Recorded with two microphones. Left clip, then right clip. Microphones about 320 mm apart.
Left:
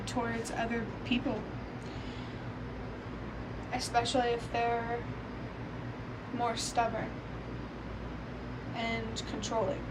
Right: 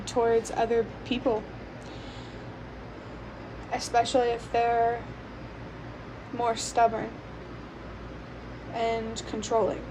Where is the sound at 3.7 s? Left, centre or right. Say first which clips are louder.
Right 6 dB; centre.